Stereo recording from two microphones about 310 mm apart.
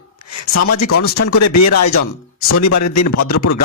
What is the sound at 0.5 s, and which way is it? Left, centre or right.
Speech, left.